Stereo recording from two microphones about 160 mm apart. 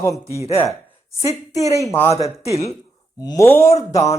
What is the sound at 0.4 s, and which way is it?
Speech, 35° left (ahead or behind).